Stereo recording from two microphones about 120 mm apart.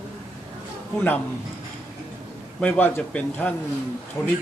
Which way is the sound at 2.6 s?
15° left (ahead or behind).